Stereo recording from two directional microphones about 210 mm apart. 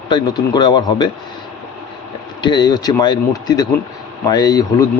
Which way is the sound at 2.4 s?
20° left (ahead or behind).